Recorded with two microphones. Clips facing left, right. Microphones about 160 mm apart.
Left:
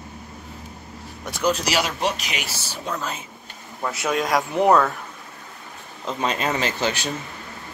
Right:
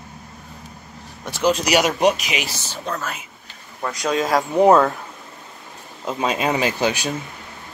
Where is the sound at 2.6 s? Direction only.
10° left (ahead or behind).